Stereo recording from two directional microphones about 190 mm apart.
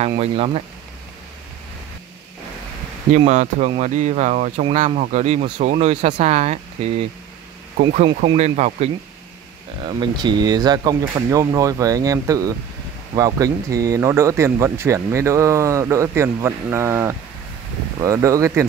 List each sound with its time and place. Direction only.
0.2 s speech: 30° right (ahead or behind)
3.1 s speech: 35° right (ahead or behind)
9.8 s speech: 25° right (ahead or behind)